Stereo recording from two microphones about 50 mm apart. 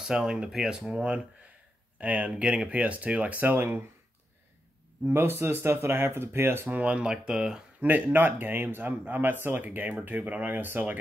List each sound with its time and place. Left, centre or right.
0.0 s speech: centre
2.0 s speech: right
5.1 s speech: right
6.8 s speech: right
7.8 s speech: right
9.6 s speech: right